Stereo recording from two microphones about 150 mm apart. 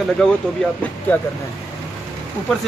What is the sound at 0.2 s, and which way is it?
Speech, 5° left (ahead or behind).